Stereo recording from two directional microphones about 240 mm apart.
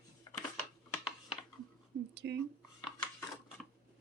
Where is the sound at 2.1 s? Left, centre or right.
Right.